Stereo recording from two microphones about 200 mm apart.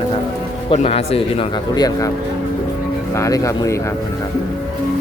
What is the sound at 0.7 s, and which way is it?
Speech, 30° left (ahead or behind).